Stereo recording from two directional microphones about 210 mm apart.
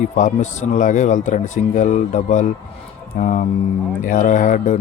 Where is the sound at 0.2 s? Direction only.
35° left (ahead or behind).